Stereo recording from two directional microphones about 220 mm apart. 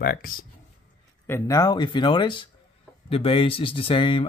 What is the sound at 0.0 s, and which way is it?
Speech, 40° left (ahead or behind).